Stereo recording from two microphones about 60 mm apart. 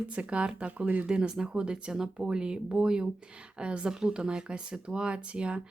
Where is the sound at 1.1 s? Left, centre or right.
Centre.